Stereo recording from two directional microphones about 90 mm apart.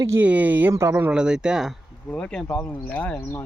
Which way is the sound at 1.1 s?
10° right (ahead or behind).